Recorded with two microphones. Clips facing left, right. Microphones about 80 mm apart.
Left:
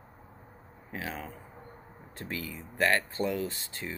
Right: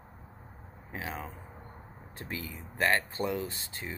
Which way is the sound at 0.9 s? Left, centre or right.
Right.